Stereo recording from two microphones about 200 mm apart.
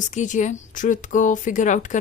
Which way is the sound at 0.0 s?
40° left (ahead or behind).